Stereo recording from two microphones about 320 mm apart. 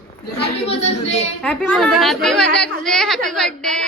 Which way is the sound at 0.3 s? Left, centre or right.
Centre.